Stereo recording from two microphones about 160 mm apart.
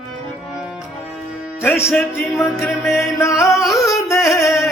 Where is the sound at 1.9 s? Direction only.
5° left (ahead or behind).